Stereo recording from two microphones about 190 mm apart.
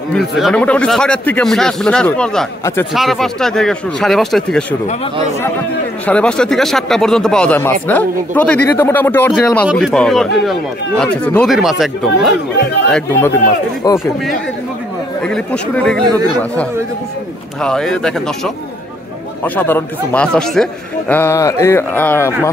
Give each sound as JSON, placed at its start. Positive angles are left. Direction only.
{"t": 0.1, "sound": "speech", "side_deg": 0}
{"t": 2.9, "sound": "speech", "side_deg": 0}
{"t": 6.0, "sound": "speech", "side_deg": 5}
{"t": 12.9, "sound": "speech", "side_deg": 10}
{"t": 15.2, "sound": "speech", "side_deg": 5}
{"t": 17.6, "sound": "speech", "side_deg": 5}